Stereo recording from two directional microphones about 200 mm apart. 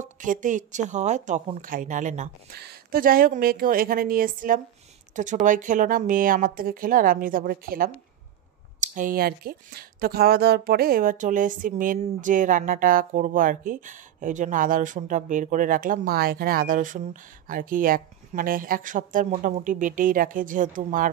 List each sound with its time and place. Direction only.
0.0 s a woman's voice: 40° right (ahead or behind)